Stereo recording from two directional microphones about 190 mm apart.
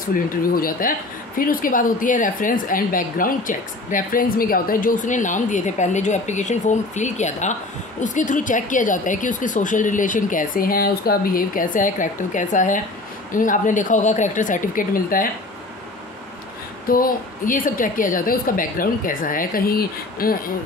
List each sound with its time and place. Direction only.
0.0 s speech: 50° left (ahead or behind)
16.9 s speech: 45° left (ahead or behind)